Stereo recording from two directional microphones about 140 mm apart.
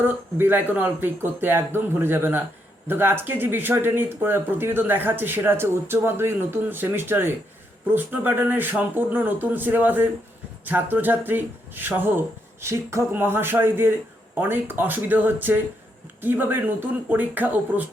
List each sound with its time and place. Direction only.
0.0 s speech: 15° right (ahead or behind)